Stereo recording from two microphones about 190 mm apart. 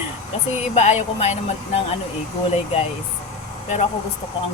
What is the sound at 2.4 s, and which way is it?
Speech, 30° left (ahead or behind).